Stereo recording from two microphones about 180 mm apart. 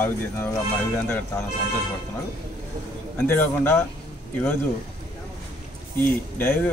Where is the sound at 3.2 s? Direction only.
10° left (ahead or behind).